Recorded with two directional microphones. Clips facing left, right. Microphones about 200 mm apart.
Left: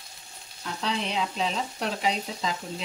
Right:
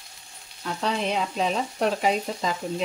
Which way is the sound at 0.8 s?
50° right (ahead or behind).